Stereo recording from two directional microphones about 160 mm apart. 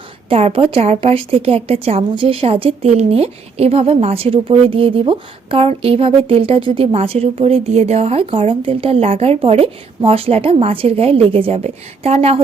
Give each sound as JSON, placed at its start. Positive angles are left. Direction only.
{"t": 0.3, "sound": "a woman's voice", "side_deg": -35}